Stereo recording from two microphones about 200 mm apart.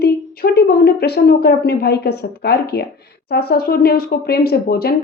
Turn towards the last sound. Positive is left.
turn(degrees=50)  # may be behind; listen again after turning